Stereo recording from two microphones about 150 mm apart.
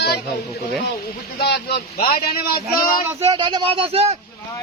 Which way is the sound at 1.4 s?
90° left.